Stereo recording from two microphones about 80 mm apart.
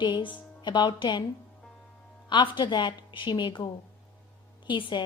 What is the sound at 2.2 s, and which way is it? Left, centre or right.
A woman's voice, left.